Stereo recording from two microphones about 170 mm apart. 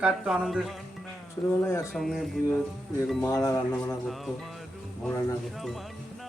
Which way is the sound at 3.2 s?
15° left (ahead or behind).